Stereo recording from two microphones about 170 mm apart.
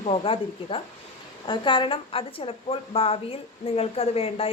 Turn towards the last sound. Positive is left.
turn(degrees=35)  # may be behind; listen again after turning